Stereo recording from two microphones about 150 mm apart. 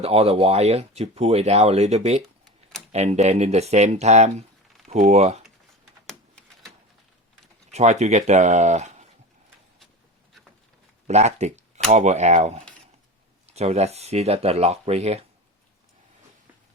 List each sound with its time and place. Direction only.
0.0 s speech: 40° right (ahead or behind)
7.7 s speech: 50° right (ahead or behind)
11.0 s speech: 50° right (ahead or behind)